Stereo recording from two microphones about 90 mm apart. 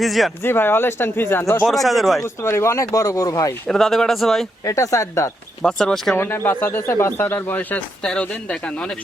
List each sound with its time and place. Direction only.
0.0 s speech: centre (ahead or behind)
0.4 s speech: 25° left (ahead or behind)
1.6 s speech: centre (ahead or behind)
2.2 s speech: 30° left (ahead or behind)
3.7 s speech: centre (ahead or behind)
4.6 s speech: 40° left (ahead or behind)
5.6 s speech: 5° left (ahead or behind)
6.1 s speech: 25° left (ahead or behind)